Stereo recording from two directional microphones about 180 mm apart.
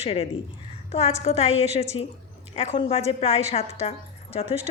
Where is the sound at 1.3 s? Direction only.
35° left (ahead or behind).